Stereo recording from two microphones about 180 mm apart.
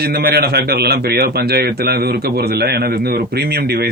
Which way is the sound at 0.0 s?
60° right (ahead or behind).